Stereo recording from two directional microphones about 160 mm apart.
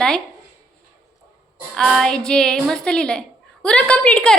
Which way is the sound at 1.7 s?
Centre (ahead or behind).